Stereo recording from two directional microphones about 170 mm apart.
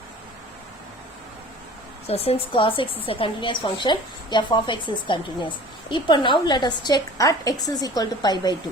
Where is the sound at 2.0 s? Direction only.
35° left (ahead or behind).